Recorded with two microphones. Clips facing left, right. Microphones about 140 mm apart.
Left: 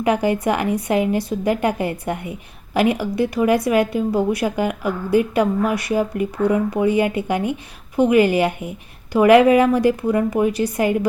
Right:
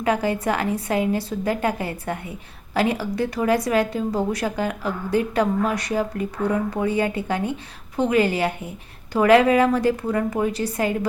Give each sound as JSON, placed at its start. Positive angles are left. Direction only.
{"t": 0.0, "sound": "a woman's voice", "side_deg": 15}